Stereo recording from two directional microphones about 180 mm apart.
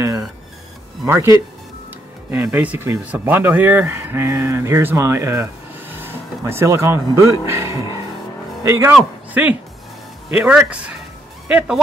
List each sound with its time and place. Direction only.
1.0 s a man's voice: 15° right (ahead or behind)